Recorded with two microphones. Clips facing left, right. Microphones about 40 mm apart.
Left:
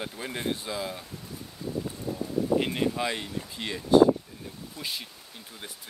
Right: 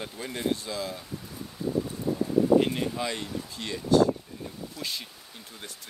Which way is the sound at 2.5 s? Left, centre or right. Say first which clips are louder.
Right 3 dB; centre.